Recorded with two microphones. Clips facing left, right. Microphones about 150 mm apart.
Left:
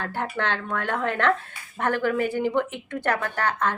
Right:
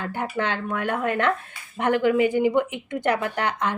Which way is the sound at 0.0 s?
10° right (ahead or behind).